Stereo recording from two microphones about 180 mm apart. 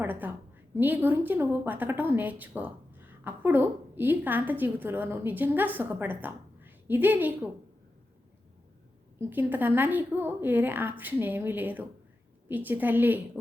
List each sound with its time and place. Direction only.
0.0 s a woman's voice: 10° right (ahead or behind)
9.3 s a woman's voice: 10° right (ahead or behind)